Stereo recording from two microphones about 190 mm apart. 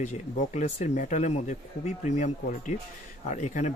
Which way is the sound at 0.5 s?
35° left (ahead or behind).